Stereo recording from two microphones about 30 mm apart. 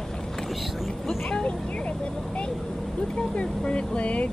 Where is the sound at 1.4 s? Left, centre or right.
Left.